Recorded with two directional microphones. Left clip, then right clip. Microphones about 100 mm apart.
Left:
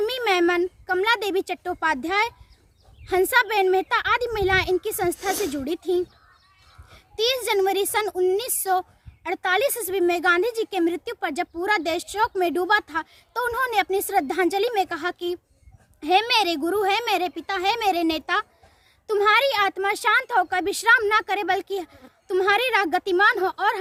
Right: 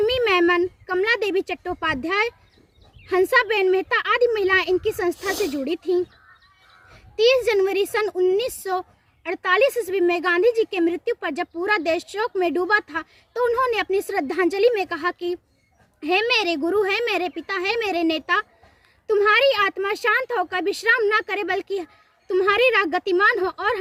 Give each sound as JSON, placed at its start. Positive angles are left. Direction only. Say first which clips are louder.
{"t": 0.0, "sound": "a sound", "louder": "right 3 dB", "side_deg": 55}
{"t": 3.1, "sound": "speech", "louder": "right 2 dB", "side_deg": 50}
{"t": 5.1, "sound": "speech", "louder": "right 1 dB", "side_deg": 30}
{"t": 5.6, "sound": "a woman's voice", "louder": "right 2 dB", "side_deg": 50}